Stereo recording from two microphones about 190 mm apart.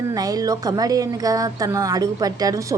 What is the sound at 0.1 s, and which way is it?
A woman's voice, 20° right (ahead or behind).